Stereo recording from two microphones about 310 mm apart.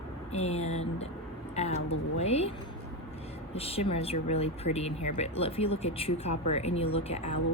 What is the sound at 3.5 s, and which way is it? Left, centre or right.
Speech, centre.